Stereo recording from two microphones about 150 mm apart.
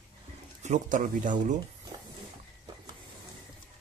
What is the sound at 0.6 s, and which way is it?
Speech, 55° right (ahead or behind).